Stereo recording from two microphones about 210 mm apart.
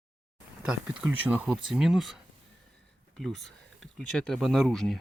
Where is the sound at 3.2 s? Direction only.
Centre (ahead or behind).